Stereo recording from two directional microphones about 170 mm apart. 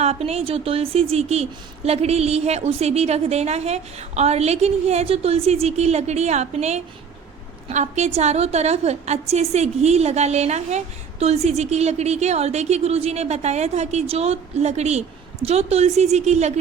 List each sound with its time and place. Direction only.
0.0 s a woman's voice: 35° right (ahead or behind)